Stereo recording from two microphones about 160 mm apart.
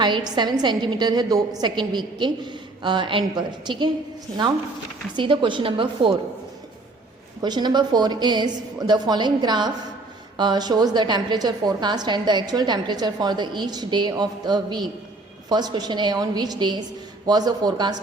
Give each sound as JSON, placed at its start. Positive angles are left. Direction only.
{"t": 0.0, "sound": "a woman's voice", "side_deg": -30}
{"t": 5.1, "sound": "a woman's voice", "side_deg": -30}
{"t": 7.4, "sound": "a woman's voice", "side_deg": -25}